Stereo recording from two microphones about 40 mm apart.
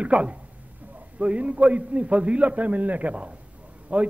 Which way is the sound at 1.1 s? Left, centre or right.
Right.